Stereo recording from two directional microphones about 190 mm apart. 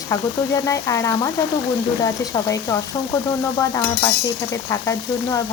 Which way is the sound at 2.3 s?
15° left (ahead or behind).